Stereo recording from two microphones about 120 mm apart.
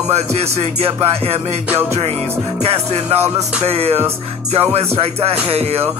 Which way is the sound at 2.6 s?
60° right (ahead or behind).